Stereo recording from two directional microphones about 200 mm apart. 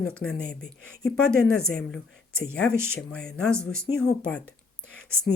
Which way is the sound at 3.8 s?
90° left.